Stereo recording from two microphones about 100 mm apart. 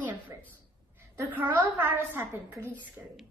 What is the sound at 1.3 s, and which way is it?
A woman's voice, 20° right (ahead or behind).